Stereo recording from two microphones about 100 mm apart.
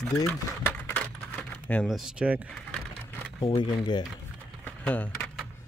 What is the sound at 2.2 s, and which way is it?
Speech, 15° right (ahead or behind).